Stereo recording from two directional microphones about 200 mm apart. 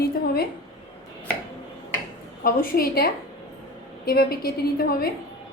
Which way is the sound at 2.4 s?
50° left (ahead or behind).